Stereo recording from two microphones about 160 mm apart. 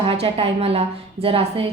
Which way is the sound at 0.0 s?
40° right (ahead or behind).